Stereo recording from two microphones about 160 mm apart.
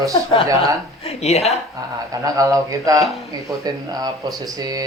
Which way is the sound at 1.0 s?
40° left (ahead or behind).